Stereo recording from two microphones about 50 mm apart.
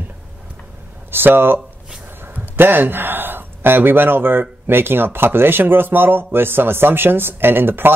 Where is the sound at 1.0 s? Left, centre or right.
Right.